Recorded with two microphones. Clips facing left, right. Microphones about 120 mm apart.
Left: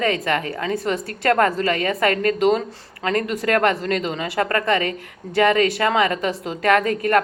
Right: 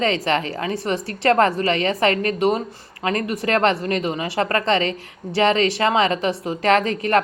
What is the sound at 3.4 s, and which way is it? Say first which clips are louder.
A woman's voice: right 1 dB; 25° right (ahead or behind).